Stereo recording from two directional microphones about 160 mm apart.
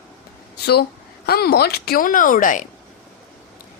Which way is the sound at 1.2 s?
75° left (ahead or behind).